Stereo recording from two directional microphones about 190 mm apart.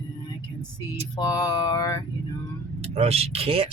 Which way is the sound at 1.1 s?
20° left (ahead or behind).